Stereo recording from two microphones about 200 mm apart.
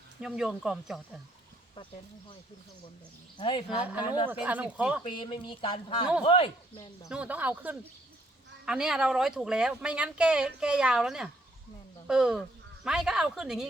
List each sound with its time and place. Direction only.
0.2 s speech: centre (ahead or behind)
1.7 s speech: 25° left (ahead or behind)
3.3 s speech: 25° left (ahead or behind)
4.3 s speech: 10° right (ahead or behind)
5.0 s speech: 25° left (ahead or behind)
7.1 s speech: 5° right (ahead or behind)